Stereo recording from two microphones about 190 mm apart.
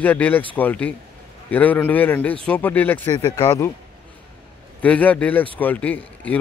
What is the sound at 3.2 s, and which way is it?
Speech, 20° left (ahead or behind).